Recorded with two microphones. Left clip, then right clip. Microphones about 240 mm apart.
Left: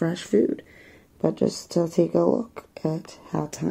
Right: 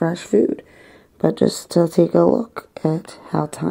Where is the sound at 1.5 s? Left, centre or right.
Right.